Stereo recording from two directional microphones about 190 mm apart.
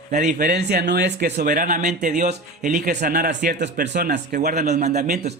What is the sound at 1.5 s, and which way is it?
A man's voice, 45° right (ahead or behind).